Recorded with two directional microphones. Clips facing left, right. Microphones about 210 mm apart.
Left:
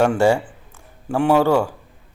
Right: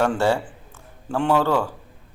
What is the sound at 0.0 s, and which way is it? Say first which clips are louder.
A man's voice: left 4 dB; 10° left (ahead or behind).